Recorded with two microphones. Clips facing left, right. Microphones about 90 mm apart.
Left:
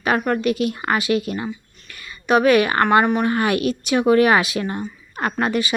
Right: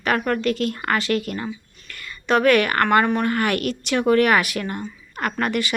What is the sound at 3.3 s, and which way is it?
Speech, 20° left (ahead or behind).